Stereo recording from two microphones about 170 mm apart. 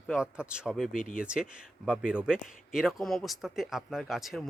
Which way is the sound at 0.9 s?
55° left (ahead or behind).